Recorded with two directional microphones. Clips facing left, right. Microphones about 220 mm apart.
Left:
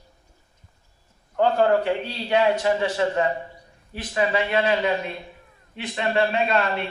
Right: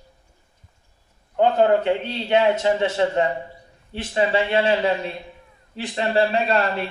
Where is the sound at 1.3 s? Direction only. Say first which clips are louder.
Right 2 dB; 20° right (ahead or behind).